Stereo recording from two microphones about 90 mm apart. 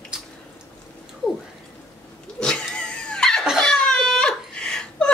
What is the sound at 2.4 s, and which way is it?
Dog, 10° left (ahead or behind).